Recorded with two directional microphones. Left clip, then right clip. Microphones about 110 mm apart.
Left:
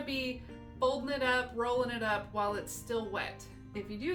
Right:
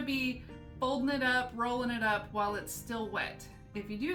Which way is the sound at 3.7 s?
30° left (ahead or behind).